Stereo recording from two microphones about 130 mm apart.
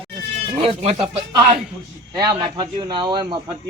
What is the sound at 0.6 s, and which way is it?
Speech, 55° right (ahead or behind).